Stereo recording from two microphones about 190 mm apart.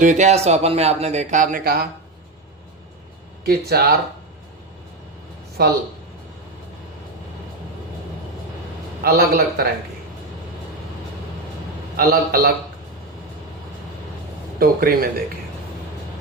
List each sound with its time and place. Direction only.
0.0 s speech: 40° right (ahead or behind)
3.4 s a man's voice: 55° right (ahead or behind)
5.6 s a man's voice: 55° right (ahead or behind)
9.0 s a man's voice: 55° right (ahead or behind)
11.9 s a man's voice: 55° right (ahead or behind)
14.6 s a man's voice: 50° right (ahead or behind)